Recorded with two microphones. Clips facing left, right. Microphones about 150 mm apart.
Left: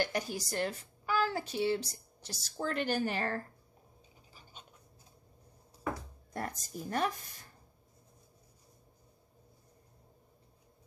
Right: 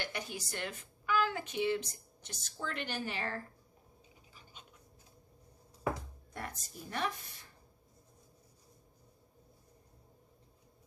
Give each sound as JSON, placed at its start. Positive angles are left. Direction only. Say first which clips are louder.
{"t": 0.0, "sound": "a woman's voice", "louder": "left 7 dB", "side_deg": 40}
{"t": 6.3, "sound": "a woman's voice", "louder": "left 5 dB", "side_deg": 40}